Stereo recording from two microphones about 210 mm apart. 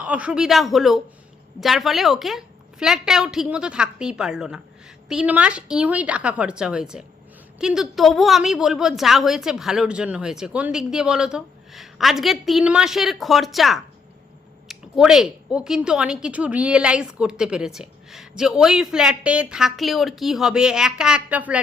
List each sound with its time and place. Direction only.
0.0 s a woman's voice: 5° right (ahead or behind)